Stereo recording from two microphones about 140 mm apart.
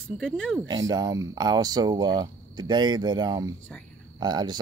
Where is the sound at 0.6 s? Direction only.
30° right (ahead or behind).